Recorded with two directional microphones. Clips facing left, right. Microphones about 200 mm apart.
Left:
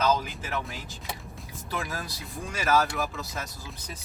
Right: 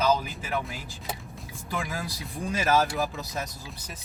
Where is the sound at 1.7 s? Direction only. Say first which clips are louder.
Right 1 dB; 15° right (ahead or behind).